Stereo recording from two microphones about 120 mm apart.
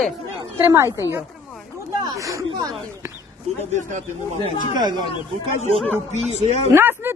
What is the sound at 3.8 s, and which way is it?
Speech, 90° right.